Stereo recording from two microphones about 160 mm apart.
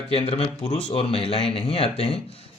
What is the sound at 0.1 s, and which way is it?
Speech, 40° left (ahead or behind).